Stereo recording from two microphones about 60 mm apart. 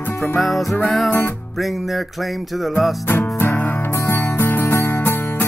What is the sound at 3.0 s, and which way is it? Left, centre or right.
Music, left.